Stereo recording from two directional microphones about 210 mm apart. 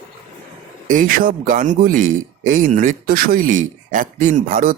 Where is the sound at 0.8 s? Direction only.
40° right (ahead or behind).